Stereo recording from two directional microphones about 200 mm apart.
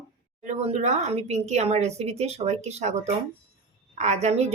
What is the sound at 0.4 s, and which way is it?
A woman's voice, 35° right (ahead or behind).